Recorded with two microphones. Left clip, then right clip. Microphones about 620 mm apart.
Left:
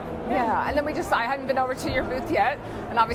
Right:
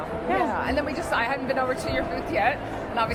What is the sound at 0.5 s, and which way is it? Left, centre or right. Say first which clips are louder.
Speech: left 2 dB; left.